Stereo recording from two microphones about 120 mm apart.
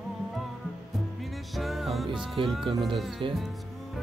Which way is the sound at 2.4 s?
45° right (ahead or behind).